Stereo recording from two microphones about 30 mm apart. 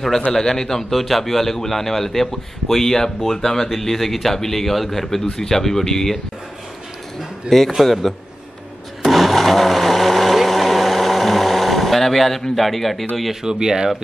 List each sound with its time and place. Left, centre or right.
0.3 s a man's voice: centre
0.9 s a man's voice: centre
5.2 s a man's voice: left
7.4 s a man's voice: centre
9.0 s vehicle: centre
13.3 s speech: right